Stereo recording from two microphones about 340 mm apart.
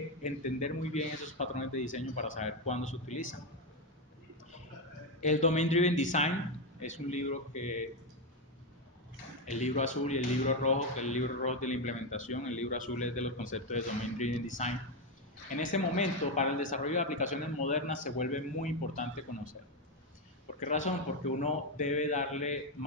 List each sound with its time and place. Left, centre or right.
0.2 s speech: left
5.2 s speech: centre
9.5 s speech: left
20.5 s speech: left